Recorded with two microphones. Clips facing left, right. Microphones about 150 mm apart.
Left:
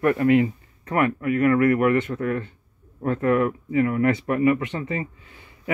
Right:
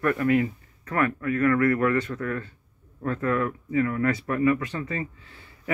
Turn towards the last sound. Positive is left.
turn(degrees=15)  # may be behind; listen again after turning